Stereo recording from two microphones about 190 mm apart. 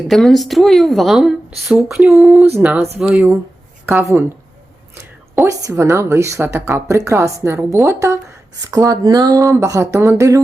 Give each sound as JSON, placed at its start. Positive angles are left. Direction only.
{"t": 0.1, "sound": "a woman's voice", "side_deg": 0}